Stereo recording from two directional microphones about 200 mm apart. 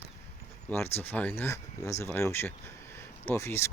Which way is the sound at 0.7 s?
10° left (ahead or behind).